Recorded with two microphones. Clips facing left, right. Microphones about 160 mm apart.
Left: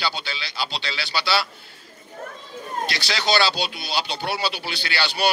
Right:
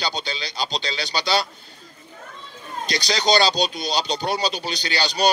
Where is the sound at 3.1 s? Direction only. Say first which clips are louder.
Right 3 dB; 40° right (ahead or behind).